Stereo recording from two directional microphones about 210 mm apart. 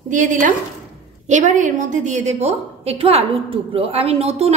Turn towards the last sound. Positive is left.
turn(degrees=-30)  # may be behind; listen again after turning